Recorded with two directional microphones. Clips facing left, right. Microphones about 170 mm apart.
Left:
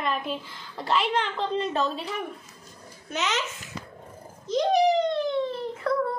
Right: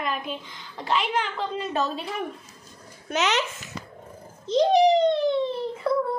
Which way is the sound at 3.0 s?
70° right (ahead or behind).